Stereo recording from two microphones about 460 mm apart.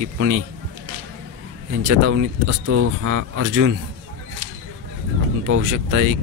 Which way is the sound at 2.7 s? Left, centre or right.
Right.